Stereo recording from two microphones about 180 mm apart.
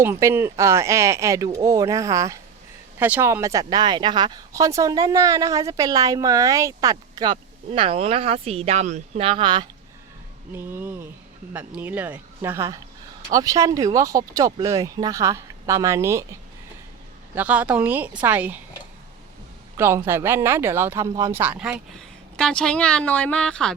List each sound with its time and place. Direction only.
0.0 s speech: 15° right (ahead or behind)
10.5 s speech: 10° right (ahead or behind)
17.3 s speech: 10° right (ahead or behind)
19.7 s speech: 15° right (ahead or behind)
22.4 s speech: 5° left (ahead or behind)